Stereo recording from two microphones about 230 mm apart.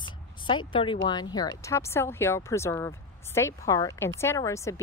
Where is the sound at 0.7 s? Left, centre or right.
Left.